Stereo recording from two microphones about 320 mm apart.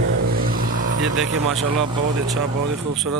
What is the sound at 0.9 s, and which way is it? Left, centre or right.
Speech, right.